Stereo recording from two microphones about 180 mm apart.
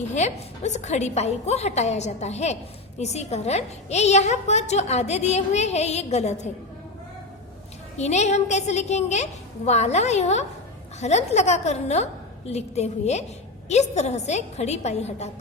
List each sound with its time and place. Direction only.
0.1 s a woman's voice: 40° left (ahead or behind)
7.9 s a woman's voice: 40° left (ahead or behind)